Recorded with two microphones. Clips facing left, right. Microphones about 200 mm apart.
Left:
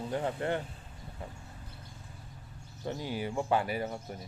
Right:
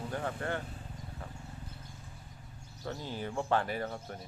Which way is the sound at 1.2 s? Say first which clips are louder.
Left 5 dB; 20° left (ahead or behind).